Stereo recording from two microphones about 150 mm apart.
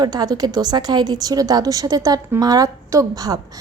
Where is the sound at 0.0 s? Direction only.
25° right (ahead or behind).